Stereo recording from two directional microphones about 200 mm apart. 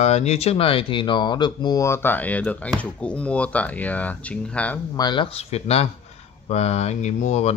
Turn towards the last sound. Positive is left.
turn(degrees=35)  # may be behind; listen again after turning